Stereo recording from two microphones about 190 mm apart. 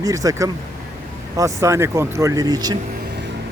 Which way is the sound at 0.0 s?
20° right (ahead or behind).